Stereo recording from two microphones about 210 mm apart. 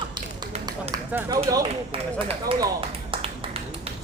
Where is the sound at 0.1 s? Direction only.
20° right (ahead or behind).